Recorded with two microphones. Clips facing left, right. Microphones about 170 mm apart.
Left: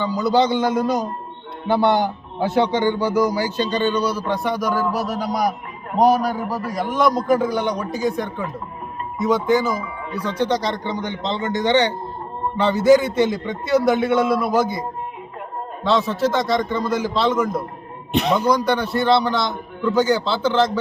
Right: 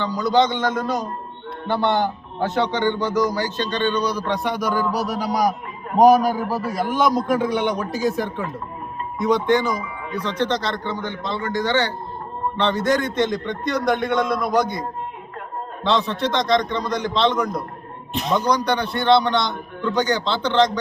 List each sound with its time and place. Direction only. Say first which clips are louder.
0.0 s a man's voice: left 1 dB; 10° left (ahead or behind)
12.5 s a man's voice: left 6 dB; 10° left (ahead or behind)
18.1 s a man's voice: left 4 dB; 70° left (ahead or behind)
18.3 s a man's voice: right 2 dB; 5° left (ahead or behind)